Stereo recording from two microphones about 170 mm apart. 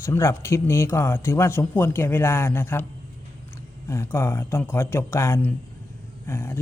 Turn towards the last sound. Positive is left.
turn(degrees=15)  # may be behind; listen again after turning